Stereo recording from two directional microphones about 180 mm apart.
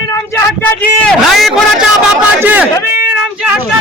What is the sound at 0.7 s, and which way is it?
Speech, 5° left (ahead or behind).